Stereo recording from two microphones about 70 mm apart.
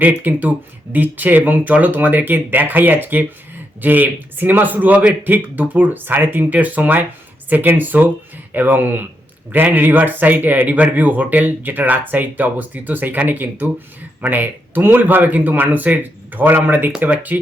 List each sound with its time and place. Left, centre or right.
0.0 s speech: right